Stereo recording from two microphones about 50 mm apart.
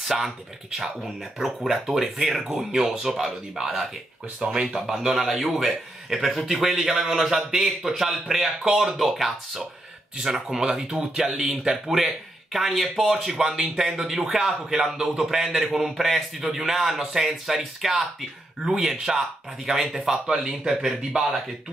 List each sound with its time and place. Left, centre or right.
0.1 s speech: centre